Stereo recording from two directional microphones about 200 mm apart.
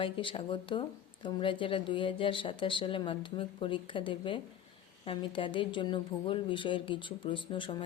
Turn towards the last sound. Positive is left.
turn(degrees=25)  # may be behind; listen again after turning